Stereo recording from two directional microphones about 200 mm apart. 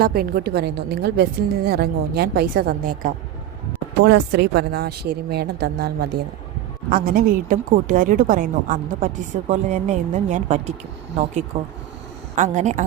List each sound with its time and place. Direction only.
0.0 s a woman's voice: 50° right (ahead or behind)
4.0 s a woman's voice: 60° right (ahead or behind); by 12.8 s 35° right (ahead or behind)